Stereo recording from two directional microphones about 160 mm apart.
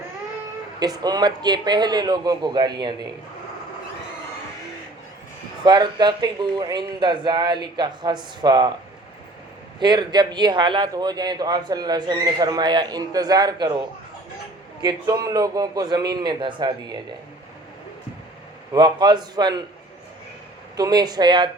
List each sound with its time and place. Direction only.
0.8 s a man's voice: 25° right (ahead or behind)
5.6 s a man's voice: 25° right (ahead or behind)
9.8 s a man's voice: 25° right (ahead or behind)
18.7 s a man's voice: 25° right (ahead or behind)
20.7 s a man's voice: 25° right (ahead or behind)